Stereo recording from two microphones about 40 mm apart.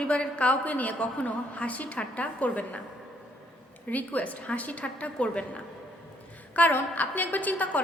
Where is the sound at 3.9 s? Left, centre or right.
Left.